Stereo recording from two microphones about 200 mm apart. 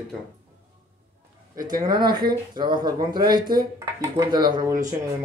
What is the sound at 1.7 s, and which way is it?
Speech, 20° right (ahead or behind).